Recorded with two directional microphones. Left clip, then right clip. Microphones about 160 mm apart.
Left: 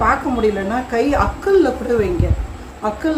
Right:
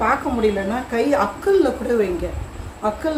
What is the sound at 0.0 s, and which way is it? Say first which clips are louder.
A woman's voice: left 3 dB; 10° left (ahead or behind).